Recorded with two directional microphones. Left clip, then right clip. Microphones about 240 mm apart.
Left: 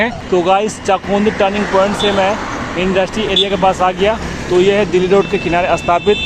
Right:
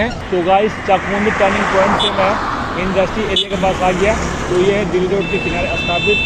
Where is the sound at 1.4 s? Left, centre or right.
Centre.